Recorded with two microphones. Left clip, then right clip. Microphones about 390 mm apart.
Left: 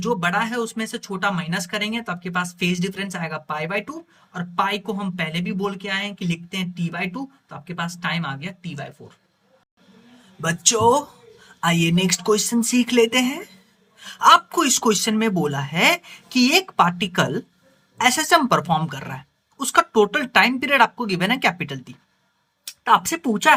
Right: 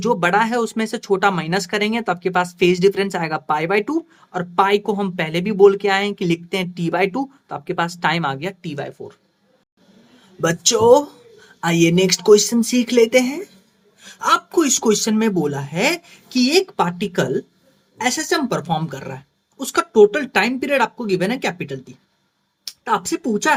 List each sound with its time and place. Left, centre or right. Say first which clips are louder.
0.0 s speech: right 5 dB; centre
10.4 s speech: right 3 dB; centre